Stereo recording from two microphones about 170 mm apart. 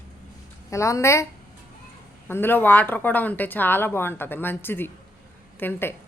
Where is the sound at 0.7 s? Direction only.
15° left (ahead or behind).